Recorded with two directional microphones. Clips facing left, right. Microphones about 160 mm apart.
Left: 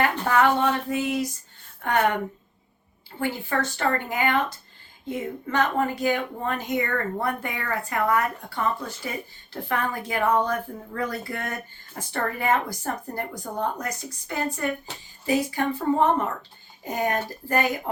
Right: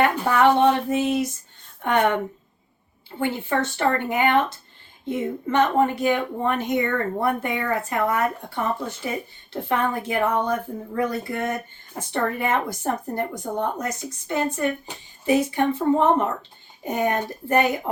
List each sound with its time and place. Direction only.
0.0 s speech: 25° right (ahead or behind)
3.2 s speech: 20° right (ahead or behind)